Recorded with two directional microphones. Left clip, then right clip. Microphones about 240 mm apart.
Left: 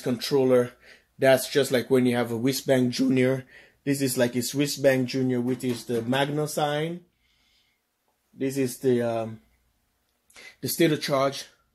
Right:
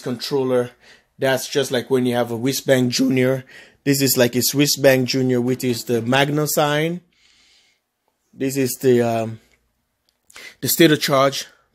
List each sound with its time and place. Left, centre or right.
0.0 s speech: centre; by 6.9 s right
8.4 s speech: right
10.3 s speech: right